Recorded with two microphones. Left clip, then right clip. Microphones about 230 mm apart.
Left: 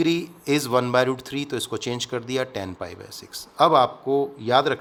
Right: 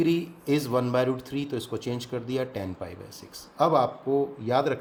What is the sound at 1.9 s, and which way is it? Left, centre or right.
Speech, left.